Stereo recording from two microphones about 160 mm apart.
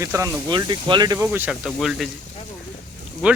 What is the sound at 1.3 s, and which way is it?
Speech, 10° right (ahead or behind).